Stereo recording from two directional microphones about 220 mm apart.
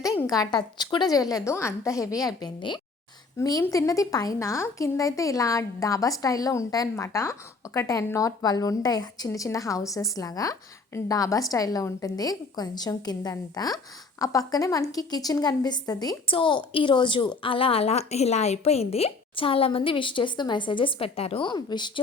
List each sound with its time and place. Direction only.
0.0 s a woman's voice: 15° left (ahead or behind)